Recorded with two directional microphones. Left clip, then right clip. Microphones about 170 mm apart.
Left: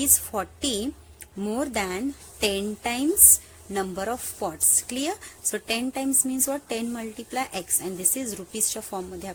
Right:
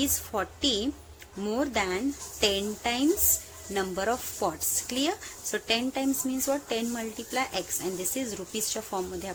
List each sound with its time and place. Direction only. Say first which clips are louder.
0.0 s a woman's voice: left 3 dB; 35° left (ahead or behind)